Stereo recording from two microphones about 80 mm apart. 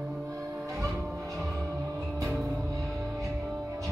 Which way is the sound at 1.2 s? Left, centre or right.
Centre.